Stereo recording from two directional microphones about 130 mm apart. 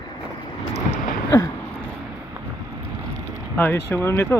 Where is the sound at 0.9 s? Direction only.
25° left (ahead or behind).